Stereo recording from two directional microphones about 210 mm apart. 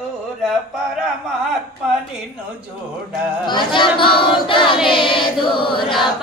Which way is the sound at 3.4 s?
20° left (ahead or behind).